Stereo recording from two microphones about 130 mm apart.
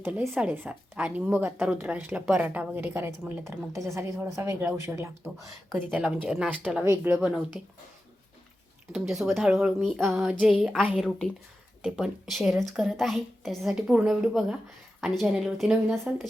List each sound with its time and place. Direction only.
0.0 s a woman's voice: 15° right (ahead or behind)
6.8 s a woman's voice: 20° right (ahead or behind)
8.9 s a woman's voice: centre (ahead or behind)